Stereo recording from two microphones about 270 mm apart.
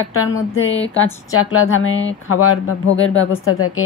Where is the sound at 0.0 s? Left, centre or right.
Left.